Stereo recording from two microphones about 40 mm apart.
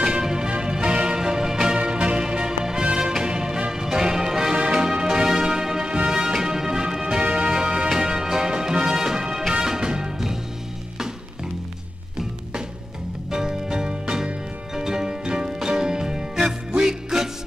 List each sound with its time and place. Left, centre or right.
0.0 s music: centre
13.3 s music: centre